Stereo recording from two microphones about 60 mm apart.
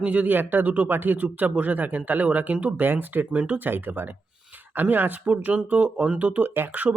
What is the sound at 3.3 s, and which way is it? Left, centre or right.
Speech, centre.